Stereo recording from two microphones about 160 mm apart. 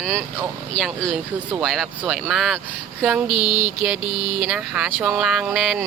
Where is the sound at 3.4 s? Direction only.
30° left (ahead or behind).